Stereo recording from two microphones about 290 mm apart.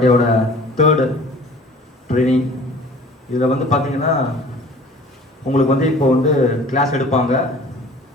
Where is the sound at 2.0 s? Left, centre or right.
Left.